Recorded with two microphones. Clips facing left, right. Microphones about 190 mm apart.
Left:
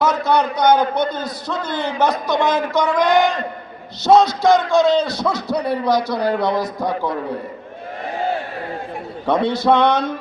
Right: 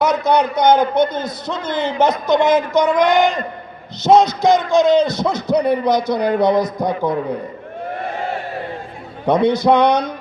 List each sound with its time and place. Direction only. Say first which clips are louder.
0.0 s a man's voice: right 2 dB; 20° right (ahead or behind)
9.2 s a man's voice: right 3 dB; 20° right (ahead or behind)